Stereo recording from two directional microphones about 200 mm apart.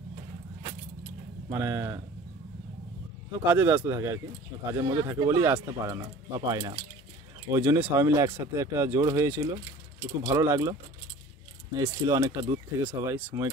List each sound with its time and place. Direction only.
1.5 s speech: 15° right (ahead or behind)
3.4 s speech: 10° right (ahead or behind)